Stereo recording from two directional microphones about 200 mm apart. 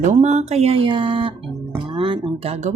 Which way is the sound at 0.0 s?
35° right (ahead or behind).